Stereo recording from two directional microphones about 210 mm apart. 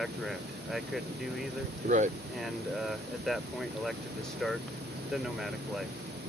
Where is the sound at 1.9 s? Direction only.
50° right (ahead or behind).